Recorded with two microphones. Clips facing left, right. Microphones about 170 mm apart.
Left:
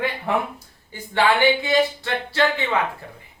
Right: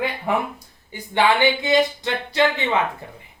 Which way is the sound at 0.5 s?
15° right (ahead or behind).